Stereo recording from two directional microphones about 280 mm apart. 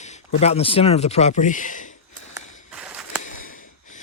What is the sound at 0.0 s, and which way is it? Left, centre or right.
Speech, left.